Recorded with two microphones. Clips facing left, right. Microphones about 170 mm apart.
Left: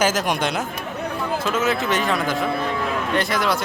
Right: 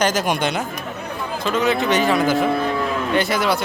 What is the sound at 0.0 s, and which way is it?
Speech, centre (ahead or behind).